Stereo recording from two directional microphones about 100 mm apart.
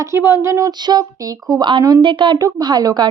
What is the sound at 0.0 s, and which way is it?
Speech, 25° right (ahead or behind).